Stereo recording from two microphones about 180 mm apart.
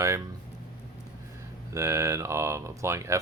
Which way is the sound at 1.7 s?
15° right (ahead or behind).